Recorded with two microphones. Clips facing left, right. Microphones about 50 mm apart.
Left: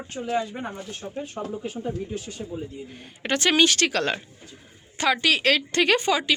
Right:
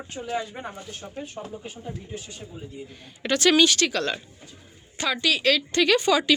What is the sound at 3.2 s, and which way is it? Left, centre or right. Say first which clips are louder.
Speech: right 1 dB; left.